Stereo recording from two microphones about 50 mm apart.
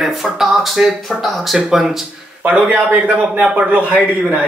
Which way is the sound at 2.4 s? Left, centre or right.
Right.